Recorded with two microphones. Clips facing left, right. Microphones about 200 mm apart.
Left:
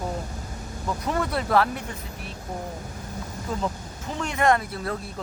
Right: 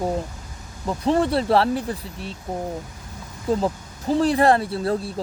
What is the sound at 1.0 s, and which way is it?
Speech, 30° right (ahead or behind).